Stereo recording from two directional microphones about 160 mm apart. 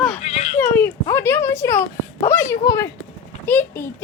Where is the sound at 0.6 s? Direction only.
15° left (ahead or behind).